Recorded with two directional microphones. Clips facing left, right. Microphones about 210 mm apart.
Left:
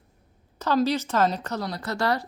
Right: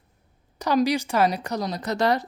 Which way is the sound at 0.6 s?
15° right (ahead or behind).